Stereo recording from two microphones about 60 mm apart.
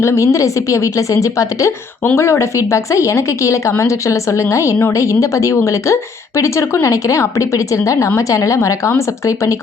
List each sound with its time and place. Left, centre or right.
0.0 s speech: left
2.1 s speech: left